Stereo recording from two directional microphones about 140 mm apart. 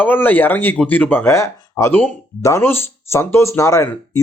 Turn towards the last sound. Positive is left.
turn(degrees=20)  # may be behind; listen again after turning